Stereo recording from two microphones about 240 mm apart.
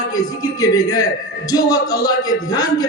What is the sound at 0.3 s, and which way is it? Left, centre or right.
A man's voice, centre.